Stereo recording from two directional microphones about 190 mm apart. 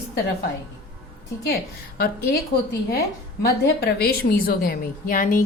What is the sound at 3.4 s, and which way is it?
A woman's voice, 55° left (ahead or behind).